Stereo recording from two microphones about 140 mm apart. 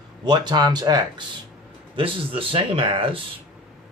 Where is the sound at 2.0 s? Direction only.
40° right (ahead or behind).